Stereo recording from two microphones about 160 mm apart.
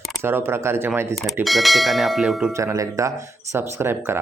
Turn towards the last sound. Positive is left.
turn(degrees=-15)  # may be behind; listen again after turning